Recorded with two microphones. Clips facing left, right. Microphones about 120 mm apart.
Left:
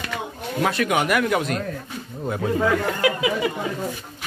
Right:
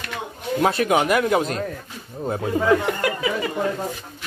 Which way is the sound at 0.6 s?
30° right (ahead or behind).